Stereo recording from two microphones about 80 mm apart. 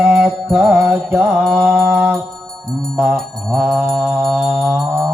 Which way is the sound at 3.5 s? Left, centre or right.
Centre.